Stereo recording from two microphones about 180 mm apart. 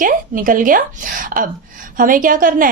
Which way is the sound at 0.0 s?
50° right (ahead or behind).